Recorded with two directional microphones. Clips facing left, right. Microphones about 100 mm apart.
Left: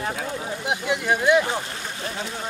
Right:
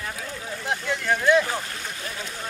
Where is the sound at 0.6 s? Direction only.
15° left (ahead or behind).